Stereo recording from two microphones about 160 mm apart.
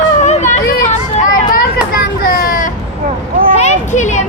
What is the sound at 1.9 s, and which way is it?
Children playing, 65° left (ahead or behind).